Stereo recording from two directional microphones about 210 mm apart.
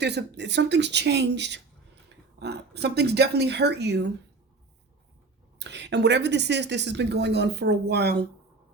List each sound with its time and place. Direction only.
0.0 s a woman's voice: 55° right (ahead or behind)
5.5 s a woman's voice: 55° right (ahead or behind)